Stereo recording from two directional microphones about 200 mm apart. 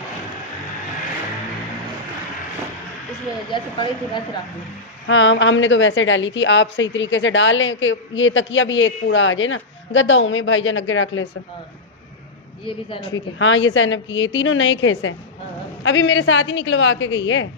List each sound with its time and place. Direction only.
3.5 s speech: 25° left (ahead or behind)
5.0 s a woman's voice: 70° left (ahead or behind)
13.1 s a woman's voice: 75° left (ahead or behind)